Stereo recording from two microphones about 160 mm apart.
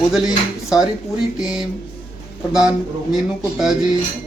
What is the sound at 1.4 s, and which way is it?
A man's voice, 5° right (ahead or behind).